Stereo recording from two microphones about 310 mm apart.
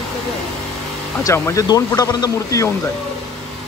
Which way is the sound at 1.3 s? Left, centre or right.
Centre.